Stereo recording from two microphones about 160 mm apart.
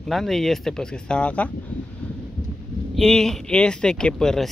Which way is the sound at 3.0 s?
5° left (ahead or behind).